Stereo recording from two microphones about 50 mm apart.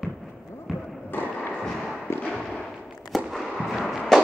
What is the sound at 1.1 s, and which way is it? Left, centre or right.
Thump, left.